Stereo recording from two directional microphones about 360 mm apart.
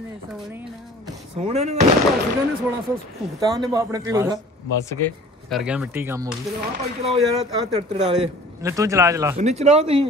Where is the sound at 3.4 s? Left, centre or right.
Centre.